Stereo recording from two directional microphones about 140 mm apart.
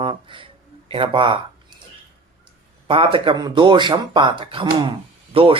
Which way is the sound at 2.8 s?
40° right (ahead or behind).